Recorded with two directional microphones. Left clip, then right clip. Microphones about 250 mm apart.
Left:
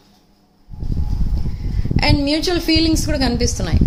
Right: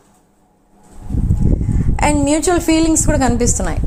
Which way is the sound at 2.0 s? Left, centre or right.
Centre.